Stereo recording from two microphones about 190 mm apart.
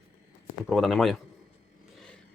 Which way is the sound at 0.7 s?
Centre (ahead or behind).